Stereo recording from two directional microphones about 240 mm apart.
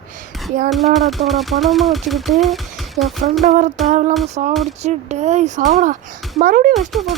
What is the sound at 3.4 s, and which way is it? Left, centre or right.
Speech, right.